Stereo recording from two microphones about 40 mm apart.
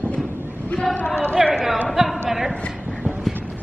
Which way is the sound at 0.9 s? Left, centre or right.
Left.